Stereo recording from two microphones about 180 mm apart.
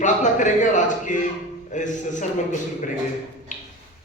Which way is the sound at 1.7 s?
45° left (ahead or behind).